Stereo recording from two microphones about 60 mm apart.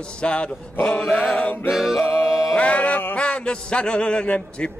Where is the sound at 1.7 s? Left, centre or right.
Centre.